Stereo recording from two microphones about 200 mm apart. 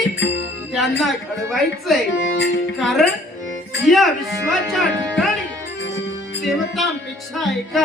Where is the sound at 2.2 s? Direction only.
55° left (ahead or behind).